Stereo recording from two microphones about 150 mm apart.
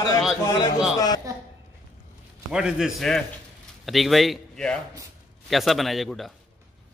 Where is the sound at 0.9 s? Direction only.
25° left (ahead or behind).